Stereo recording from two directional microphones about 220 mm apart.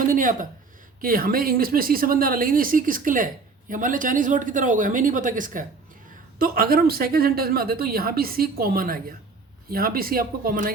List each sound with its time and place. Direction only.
0.1 s speech: 40° right (ahead or behind)